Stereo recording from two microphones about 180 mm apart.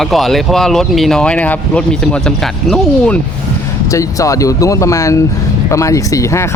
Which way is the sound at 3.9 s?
15° left (ahead or behind).